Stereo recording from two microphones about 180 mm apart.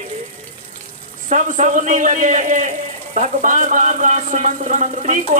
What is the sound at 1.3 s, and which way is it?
A man's voice, 45° right (ahead or behind).